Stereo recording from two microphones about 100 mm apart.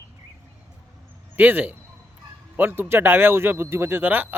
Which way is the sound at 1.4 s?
20° right (ahead or behind).